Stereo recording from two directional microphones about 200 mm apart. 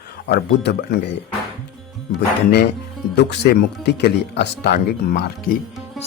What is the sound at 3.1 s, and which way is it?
Speech, 55° left (ahead or behind).